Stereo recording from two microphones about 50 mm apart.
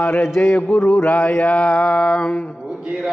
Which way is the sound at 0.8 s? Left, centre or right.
Left.